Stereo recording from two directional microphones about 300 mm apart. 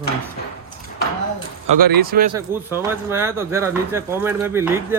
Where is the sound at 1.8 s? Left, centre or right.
Right.